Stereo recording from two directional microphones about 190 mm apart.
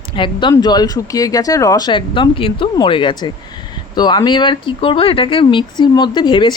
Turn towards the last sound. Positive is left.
turn(degrees=25)  # may be behind; listen again after turning